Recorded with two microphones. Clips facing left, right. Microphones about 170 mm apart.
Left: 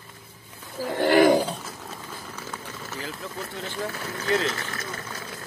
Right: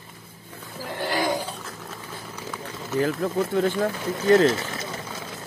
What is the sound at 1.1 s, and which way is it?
Speech, 65° left (ahead or behind).